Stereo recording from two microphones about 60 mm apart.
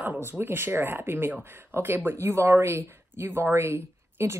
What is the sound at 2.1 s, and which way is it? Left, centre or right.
Speech, right.